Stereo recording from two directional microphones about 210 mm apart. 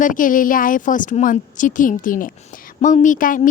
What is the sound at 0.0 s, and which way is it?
A woman's voice, 40° left (ahead or behind).